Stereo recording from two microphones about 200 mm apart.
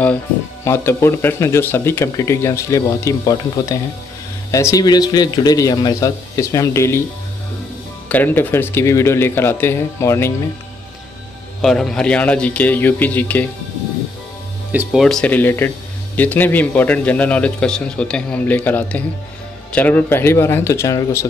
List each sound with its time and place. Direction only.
0.7 s speech: 10° left (ahead or behind)
8.1 s speech: 10° left (ahead or behind)
11.6 s speech: centre (ahead or behind)
14.7 s speech: 5° right (ahead or behind); by 21.3 s 15° left (ahead or behind)